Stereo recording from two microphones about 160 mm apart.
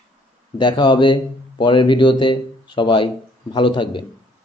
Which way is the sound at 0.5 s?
30° left (ahead or behind).